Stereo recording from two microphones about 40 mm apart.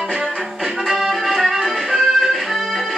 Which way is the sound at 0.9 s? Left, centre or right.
Centre.